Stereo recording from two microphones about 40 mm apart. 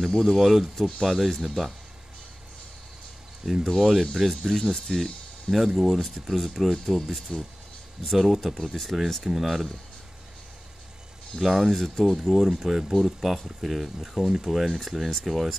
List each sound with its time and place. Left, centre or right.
0.2 s speech: centre
3.4 s speech: centre
11.3 s speech: centre